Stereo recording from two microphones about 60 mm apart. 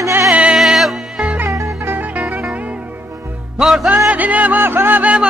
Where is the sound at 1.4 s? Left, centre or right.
Right.